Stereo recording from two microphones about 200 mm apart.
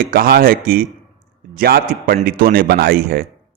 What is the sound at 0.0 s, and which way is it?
A man's voice, 45° right (ahead or behind).